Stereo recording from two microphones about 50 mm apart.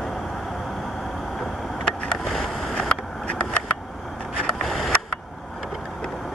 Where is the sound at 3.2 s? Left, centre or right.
Centre.